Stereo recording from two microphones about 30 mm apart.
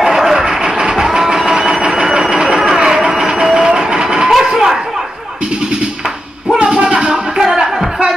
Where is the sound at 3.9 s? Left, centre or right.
Right.